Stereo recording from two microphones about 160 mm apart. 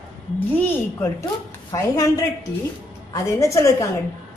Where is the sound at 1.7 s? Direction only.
20° left (ahead or behind).